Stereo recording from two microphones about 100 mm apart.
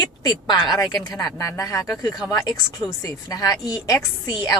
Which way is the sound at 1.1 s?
35° left (ahead or behind).